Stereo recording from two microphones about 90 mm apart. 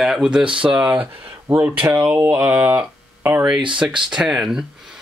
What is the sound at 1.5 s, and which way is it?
Speech, 20° right (ahead or behind).